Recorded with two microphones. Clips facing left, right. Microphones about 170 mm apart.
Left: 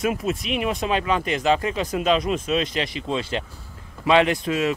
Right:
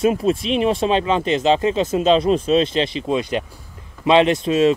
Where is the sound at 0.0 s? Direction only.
30° right (ahead or behind).